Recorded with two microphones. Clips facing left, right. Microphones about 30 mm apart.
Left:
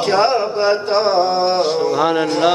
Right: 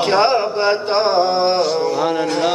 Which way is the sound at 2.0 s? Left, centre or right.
Left.